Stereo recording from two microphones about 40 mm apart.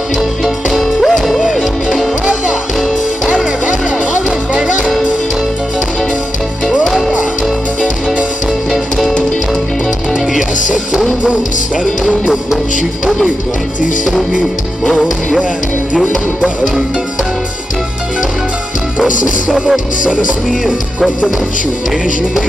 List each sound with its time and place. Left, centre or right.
0.7 s music: centre
10.3 s music: centre
16.0 s music: centre